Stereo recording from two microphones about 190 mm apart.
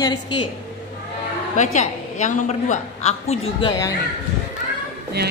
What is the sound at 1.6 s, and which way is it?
A woman's voice, 40° left (ahead or behind).